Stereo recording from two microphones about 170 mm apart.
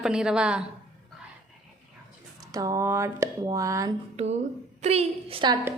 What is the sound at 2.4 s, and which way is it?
Speech, 20° right (ahead or behind).